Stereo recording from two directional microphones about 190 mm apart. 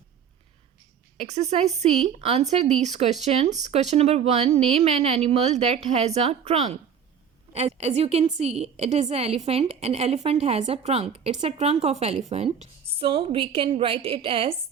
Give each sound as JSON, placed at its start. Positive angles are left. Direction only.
{"t": 1.1, "sound": "a woman's voice", "side_deg": -35}